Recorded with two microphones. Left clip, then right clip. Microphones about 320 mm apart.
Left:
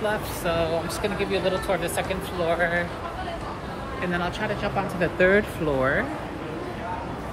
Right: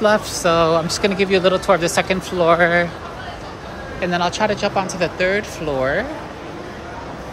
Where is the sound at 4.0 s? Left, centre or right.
Centre.